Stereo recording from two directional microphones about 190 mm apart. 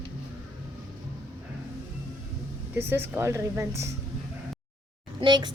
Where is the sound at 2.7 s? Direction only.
10° right (ahead or behind).